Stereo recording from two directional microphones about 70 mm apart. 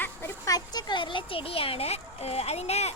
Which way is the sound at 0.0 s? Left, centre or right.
Left.